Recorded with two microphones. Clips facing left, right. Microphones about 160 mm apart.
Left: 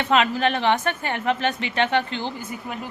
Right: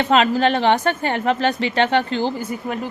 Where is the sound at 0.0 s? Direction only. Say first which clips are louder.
Right 4 dB; 35° right (ahead or behind).